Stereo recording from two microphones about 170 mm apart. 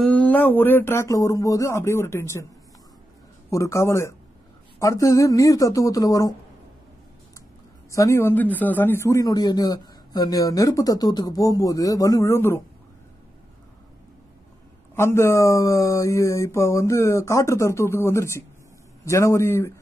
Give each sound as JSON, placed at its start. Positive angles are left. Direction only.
{"t": 0.0, "sound": "speech", "side_deg": 10}
{"t": 3.4, "sound": "speech", "side_deg": 20}
{"t": 7.9, "sound": "speech", "side_deg": 15}
{"t": 15.0, "sound": "speech", "side_deg": 15}